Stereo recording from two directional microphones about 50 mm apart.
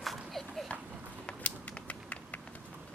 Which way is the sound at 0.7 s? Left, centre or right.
Left.